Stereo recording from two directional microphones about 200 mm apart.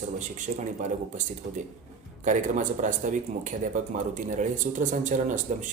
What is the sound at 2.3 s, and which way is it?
A man's voice, 40° right (ahead or behind).